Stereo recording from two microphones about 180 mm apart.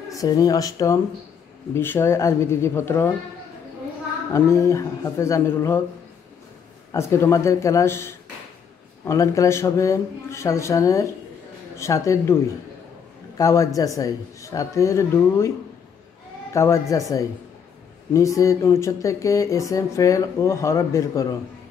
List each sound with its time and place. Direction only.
0.1 s speech: 20° left (ahead or behind)
4.3 s speech: 15° left (ahead or behind)
6.9 s speech: 15° left (ahead or behind)
13.4 s speech: 15° left (ahead or behind)
16.5 s speech: 15° left (ahead or behind)